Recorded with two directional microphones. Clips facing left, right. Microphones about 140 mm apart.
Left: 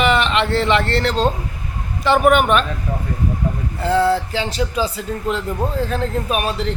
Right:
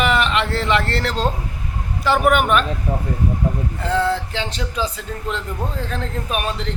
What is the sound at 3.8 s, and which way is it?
A man's voice, 5° left (ahead or behind).